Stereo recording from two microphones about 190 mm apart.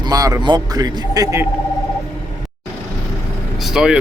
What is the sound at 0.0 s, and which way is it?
A man's voice, 20° right (ahead or behind).